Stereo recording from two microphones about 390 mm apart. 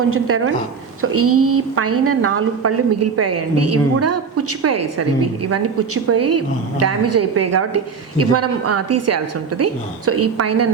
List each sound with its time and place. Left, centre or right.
0.1 s a woman's voice: right